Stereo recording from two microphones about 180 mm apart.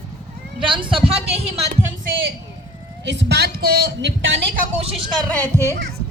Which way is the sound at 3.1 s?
70° right (ahead or behind).